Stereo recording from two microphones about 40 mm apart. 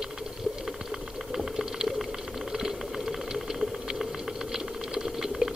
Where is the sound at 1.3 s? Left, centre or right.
Centre.